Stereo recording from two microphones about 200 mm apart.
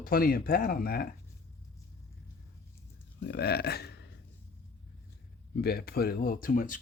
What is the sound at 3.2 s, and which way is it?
Speech, 55° left (ahead or behind).